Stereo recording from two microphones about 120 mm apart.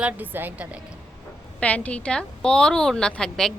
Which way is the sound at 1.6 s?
10° left (ahead or behind).